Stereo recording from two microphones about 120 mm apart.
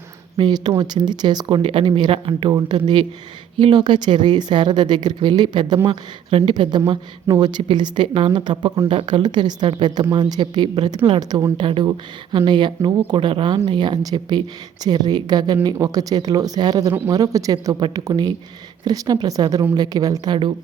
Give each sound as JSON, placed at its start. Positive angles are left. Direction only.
{"t": 0.3, "sound": "speech", "side_deg": -40}
{"t": 2.5, "sound": "speech", "side_deg": -35}
{"t": 11.5, "sound": "speech", "side_deg": -45}